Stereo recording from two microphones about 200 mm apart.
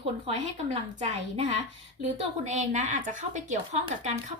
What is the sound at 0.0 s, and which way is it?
A woman's voice, 30° right (ahead or behind).